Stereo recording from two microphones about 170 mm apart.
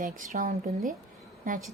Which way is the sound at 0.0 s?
50° right (ahead or behind).